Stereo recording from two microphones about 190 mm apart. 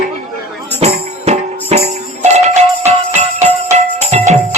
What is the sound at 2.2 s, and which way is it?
Jingle bell, 35° right (ahead or behind).